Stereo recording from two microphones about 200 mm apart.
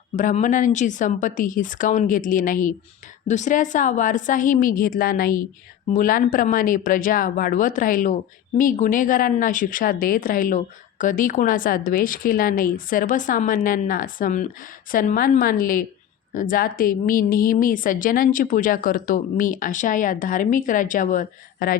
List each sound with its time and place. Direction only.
0.2 s speech: 40° left (ahead or behind)